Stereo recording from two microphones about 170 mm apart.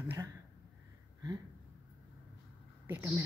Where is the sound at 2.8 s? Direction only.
10° right (ahead or behind).